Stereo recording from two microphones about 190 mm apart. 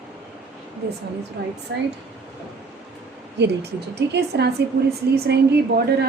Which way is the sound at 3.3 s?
60° right (ahead or behind).